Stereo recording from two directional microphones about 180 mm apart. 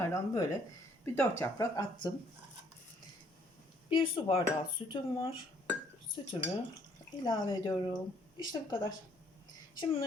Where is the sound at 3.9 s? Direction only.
30° left (ahead or behind).